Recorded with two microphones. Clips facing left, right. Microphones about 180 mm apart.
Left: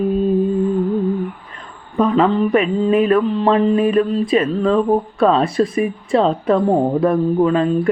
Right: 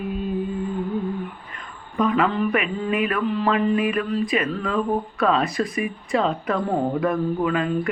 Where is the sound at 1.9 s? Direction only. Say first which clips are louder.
Left 6 dB; 30° left (ahead or behind).